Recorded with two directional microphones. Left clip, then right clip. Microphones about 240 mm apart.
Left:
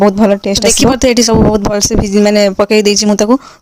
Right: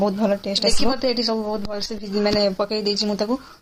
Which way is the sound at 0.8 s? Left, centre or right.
Left.